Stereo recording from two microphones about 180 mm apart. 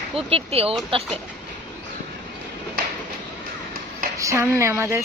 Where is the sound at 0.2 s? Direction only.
35° right (ahead or behind).